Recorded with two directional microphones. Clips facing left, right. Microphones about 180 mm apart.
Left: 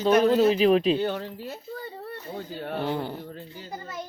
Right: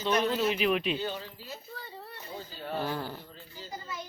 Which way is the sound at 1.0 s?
60° left (ahead or behind).